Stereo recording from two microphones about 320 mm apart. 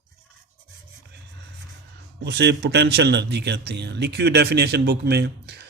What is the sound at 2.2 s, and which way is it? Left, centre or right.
A man's voice, right.